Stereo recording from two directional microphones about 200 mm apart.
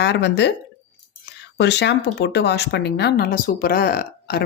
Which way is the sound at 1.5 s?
60° left (ahead or behind).